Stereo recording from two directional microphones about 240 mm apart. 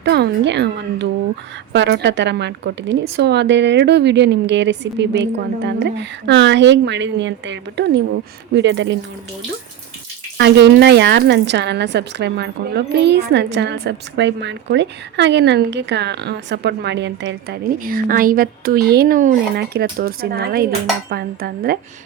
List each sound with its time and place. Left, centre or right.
0.0 s a woman's voice: right
10.3 s a woman's voice: right
21.1 s dishes: right